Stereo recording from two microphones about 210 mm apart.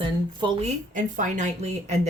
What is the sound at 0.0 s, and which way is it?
Speech, 25° right (ahead or behind).